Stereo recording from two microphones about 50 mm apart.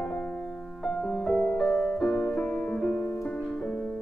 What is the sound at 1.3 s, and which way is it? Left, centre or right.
Music, centre.